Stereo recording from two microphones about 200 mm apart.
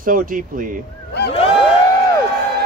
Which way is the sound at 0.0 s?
45° right (ahead or behind).